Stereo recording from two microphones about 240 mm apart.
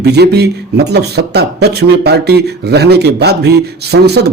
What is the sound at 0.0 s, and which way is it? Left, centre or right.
A man's voice, right.